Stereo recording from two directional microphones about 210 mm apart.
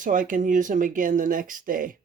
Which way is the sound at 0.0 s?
40° right (ahead or behind).